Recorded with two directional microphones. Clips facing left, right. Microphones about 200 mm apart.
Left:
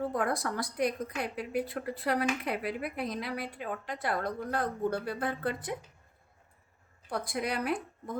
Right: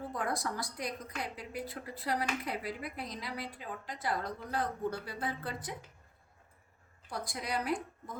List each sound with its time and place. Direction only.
0.1 s a woman's voice: 60° left (ahead or behind)
7.1 s a woman's voice: 60° left (ahead or behind)